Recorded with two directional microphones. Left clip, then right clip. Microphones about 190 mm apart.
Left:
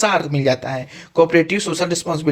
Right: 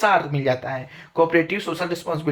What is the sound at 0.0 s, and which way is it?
A man's voice, 40° left (ahead or behind).